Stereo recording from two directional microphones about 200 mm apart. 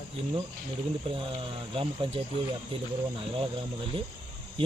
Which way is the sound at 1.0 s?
25° right (ahead or behind).